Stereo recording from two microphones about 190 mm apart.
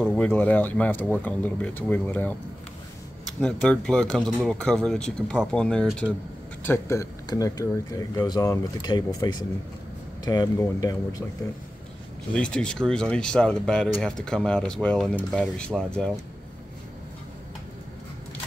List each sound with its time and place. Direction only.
0.0 s speech: 5° left (ahead or behind)
3.3 s speech: 5° left (ahead or behind)
12.4 s speech: 5° left (ahead or behind)